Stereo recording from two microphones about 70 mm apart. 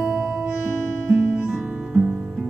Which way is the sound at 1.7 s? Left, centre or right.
Centre.